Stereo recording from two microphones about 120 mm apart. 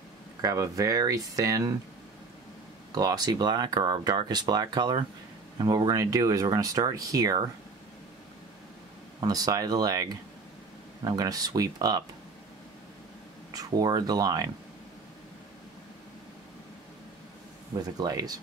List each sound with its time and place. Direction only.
0.4 s speech: 30° right (ahead or behind)
2.9 s speech: 30° right (ahead or behind)
9.2 s speech: 30° right (ahead or behind)
11.1 s speech: 30° right (ahead or behind)
13.5 s speech: 30° right (ahead or behind)
17.9 s speech: 30° right (ahead or behind)